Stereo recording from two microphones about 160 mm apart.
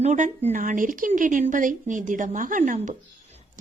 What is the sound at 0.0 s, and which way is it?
A woman's voice, 45° right (ahead or behind).